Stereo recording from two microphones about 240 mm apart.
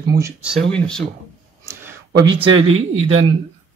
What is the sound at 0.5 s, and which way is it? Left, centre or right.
Speech, centre.